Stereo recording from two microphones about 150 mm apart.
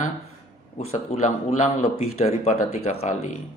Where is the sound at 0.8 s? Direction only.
45° left (ahead or behind).